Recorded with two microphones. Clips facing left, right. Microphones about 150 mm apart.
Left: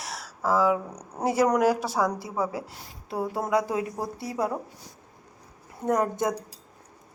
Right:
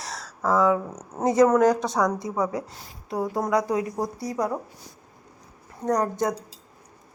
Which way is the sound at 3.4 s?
25° left (ahead or behind).